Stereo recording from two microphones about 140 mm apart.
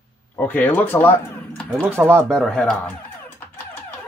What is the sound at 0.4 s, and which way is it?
Speech, 15° left (ahead or behind).